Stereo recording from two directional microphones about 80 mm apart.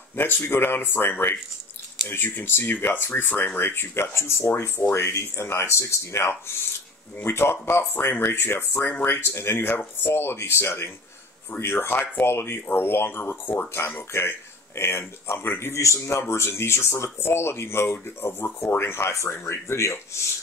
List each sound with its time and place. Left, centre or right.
0.1 s speech: left